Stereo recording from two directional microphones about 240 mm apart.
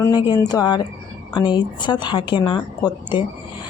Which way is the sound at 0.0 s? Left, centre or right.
Centre.